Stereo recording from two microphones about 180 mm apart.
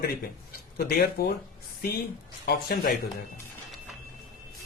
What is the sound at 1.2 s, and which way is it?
Speech, 60° left (ahead or behind).